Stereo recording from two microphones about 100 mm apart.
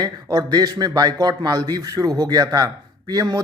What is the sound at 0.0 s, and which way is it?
A man's voice, 35° right (ahead or behind).